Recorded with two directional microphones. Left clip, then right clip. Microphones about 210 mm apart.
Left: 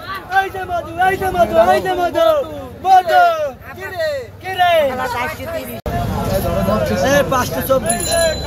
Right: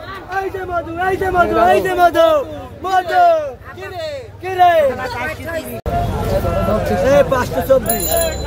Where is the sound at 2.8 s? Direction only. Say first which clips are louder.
Left 4 dB; 35° right (ahead or behind).